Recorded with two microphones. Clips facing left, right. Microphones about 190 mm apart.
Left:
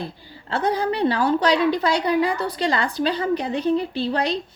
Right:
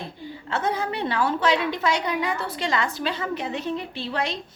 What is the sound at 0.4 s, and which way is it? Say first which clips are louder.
A woman's voice: left 4 dB; 35° left (ahead or behind).